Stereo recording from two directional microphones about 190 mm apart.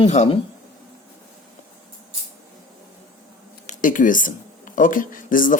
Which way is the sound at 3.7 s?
45° left (ahead or behind).